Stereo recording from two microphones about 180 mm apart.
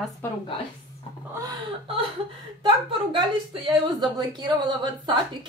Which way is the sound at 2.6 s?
25° right (ahead or behind).